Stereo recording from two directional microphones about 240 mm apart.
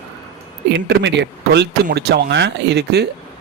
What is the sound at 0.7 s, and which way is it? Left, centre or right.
Speech, right.